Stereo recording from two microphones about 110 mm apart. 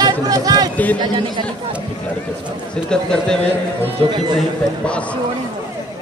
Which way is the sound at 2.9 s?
5° left (ahead or behind).